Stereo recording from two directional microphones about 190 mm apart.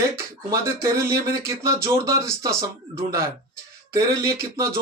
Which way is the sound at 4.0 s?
15° right (ahead or behind).